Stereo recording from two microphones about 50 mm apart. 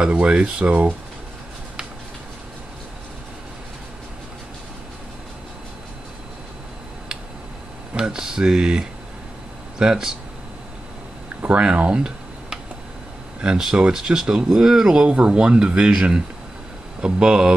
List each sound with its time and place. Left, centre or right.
0.3 s speech: right
7.9 s speech: centre
11.4 s speech: right
13.6 s speech: centre